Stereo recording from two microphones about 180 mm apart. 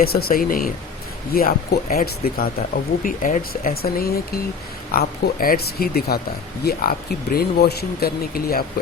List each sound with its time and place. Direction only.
0.0 s speech: 55° left (ahead or behind)